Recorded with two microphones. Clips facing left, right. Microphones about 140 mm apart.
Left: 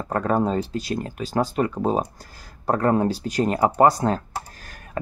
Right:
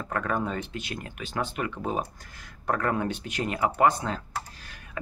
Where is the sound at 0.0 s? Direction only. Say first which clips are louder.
Left 7 dB; 35° left (ahead or behind).